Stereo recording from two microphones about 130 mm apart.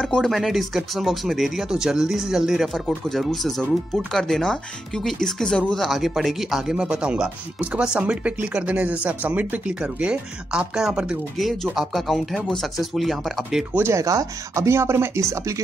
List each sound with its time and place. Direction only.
0.0 s speech: 5° left (ahead or behind)
13.7 s speech: 20° right (ahead or behind)